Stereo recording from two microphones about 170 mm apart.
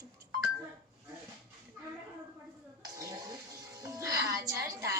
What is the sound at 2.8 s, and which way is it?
Bathtub, 20° right (ahead or behind).